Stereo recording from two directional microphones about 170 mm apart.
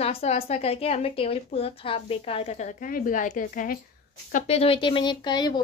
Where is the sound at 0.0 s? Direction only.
35° left (ahead or behind); by 3.8 s 55° left (ahead or behind).